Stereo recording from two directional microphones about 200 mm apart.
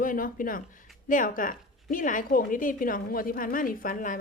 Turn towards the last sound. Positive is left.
turn(degrees=40)  # may be behind; listen again after turning